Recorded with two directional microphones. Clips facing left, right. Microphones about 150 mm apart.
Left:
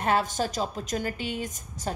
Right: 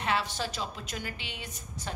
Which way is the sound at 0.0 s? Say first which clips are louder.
Left 6 dB; 45° left (ahead or behind).